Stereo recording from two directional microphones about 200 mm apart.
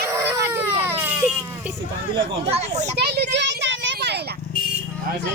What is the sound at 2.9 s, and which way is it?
A child's voice, 55° right (ahead or behind).